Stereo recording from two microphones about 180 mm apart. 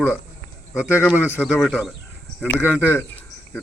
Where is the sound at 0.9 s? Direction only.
10° left (ahead or behind).